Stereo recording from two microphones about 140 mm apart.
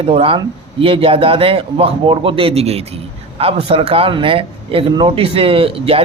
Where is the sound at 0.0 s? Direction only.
45° right (ahead or behind).